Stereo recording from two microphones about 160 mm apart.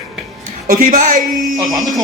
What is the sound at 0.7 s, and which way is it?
Speech, 55° right (ahead or behind).